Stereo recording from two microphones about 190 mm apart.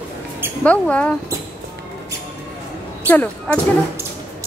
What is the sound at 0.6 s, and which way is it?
Speech, 5° left (ahead or behind).